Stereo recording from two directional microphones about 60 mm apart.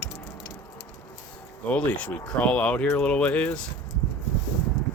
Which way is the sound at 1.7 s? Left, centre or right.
Left.